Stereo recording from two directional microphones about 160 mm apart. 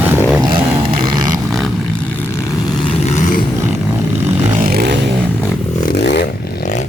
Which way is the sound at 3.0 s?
45° left (ahead or behind).